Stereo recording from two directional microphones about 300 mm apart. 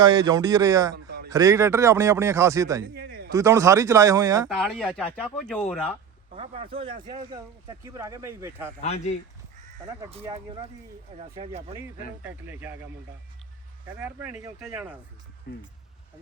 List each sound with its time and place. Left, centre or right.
0.0 s speech: centre
2.8 s a sound: right
3.3 s speech: centre
4.4 s speech: centre
6.3 s speech: centre
8.8 s speech: left
10.1 s speech: centre
12.2 s speech: centre
14.0 s speech: centre
15.5 s speech: left